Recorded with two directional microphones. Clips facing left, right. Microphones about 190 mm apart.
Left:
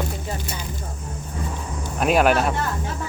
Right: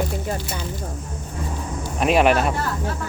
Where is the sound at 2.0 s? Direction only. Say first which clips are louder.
Right 1 dB; centre (ahead or behind).